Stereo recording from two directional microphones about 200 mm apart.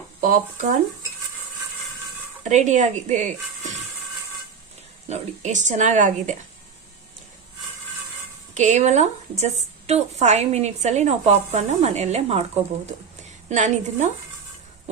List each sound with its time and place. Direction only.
0.2 s speech: 45° right (ahead or behind)
2.4 s a woman's voice: 35° right (ahead or behind)
5.0 s a woman's voice: 35° right (ahead or behind)
8.5 s a woman's voice: 35° right (ahead or behind)